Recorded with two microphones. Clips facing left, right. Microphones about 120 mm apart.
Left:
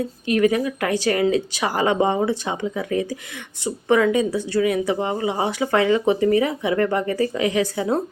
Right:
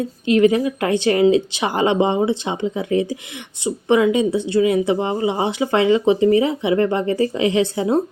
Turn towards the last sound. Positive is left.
turn(degrees=-25)  # may be behind; listen again after turning